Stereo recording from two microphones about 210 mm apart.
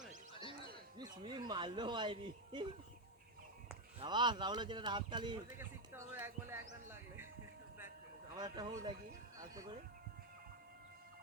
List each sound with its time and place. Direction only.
0.9 s speech: 20° right (ahead or behind)
4.0 s speech: 20° right (ahead or behind)
8.4 s speech: 20° right (ahead or behind)